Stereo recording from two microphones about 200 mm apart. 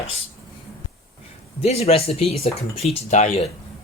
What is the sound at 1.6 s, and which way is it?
Speech, 30° left (ahead or behind).